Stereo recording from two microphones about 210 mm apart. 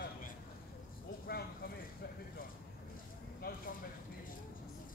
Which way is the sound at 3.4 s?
45° left (ahead or behind).